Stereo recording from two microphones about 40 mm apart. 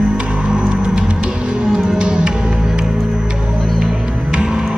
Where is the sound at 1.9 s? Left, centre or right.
Right.